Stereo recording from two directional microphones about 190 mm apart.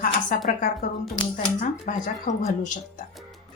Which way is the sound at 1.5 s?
40° left (ahead or behind).